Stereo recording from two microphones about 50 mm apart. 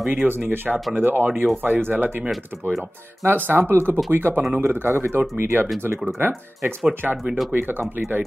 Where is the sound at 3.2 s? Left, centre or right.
Right.